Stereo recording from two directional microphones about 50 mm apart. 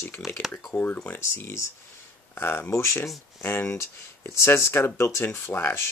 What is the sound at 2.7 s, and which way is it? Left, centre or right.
Speech, left.